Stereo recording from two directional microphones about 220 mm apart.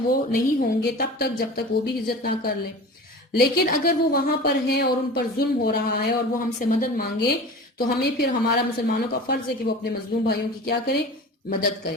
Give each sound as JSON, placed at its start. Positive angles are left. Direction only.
{"t": 0.1, "sound": "a woman's voice", "side_deg": 40}